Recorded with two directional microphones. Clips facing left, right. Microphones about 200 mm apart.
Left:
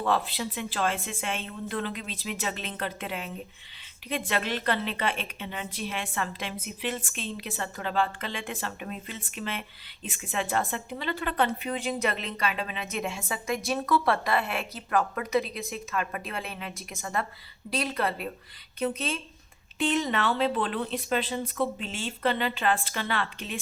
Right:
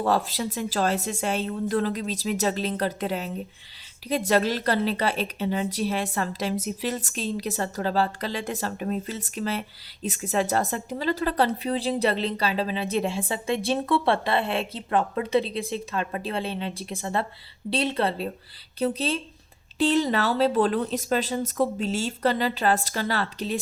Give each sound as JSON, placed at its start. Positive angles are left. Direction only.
{"t": 0.0, "sound": "a woman's voice", "side_deg": -40}